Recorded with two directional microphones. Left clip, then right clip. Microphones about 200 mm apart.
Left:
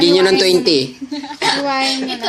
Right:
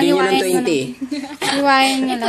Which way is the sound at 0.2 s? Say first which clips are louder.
Left 4 dB; 30° left (ahead or behind).